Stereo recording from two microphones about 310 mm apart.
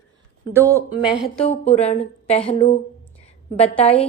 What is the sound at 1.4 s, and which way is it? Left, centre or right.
Speech, left.